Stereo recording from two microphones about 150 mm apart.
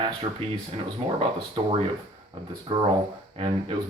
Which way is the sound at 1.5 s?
35° right (ahead or behind).